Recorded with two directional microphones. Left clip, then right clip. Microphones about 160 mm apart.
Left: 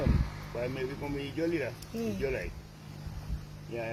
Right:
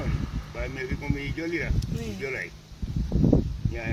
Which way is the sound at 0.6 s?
20° right (ahead or behind).